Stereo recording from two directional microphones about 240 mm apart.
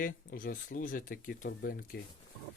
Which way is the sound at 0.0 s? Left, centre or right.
Left.